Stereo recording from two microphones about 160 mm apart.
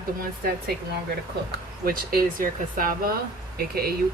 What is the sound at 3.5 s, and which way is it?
Speech, 75° right (ahead or behind).